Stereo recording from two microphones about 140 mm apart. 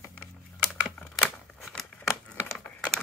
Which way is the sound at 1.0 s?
10° left (ahead or behind).